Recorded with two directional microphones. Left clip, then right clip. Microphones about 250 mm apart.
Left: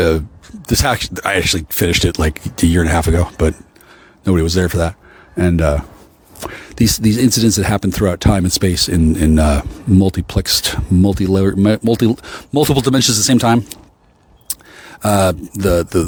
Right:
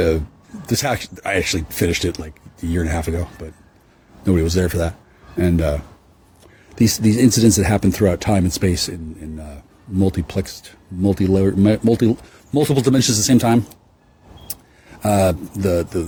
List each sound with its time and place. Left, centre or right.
0.6 s speech: left
15.0 s speech: left